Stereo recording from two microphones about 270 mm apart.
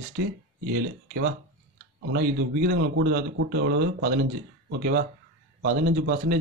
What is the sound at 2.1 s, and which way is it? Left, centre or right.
A man's voice, right.